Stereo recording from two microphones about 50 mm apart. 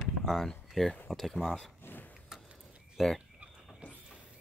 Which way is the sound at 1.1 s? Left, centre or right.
Centre.